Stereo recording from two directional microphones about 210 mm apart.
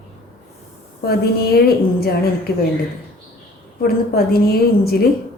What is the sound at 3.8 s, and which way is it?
A woman's voice, 45° left (ahead or behind).